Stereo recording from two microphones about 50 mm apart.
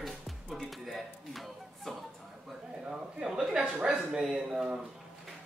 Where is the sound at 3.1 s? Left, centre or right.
Centre.